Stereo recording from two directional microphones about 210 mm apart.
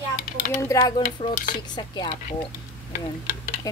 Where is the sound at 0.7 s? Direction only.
15° left (ahead or behind).